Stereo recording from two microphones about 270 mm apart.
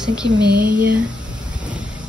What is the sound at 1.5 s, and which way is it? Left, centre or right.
Vehicle, centre.